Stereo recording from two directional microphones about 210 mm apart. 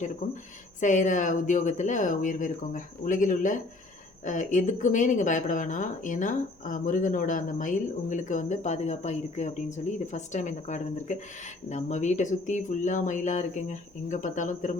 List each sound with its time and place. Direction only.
0.8 s speech: 35° left (ahead or behind)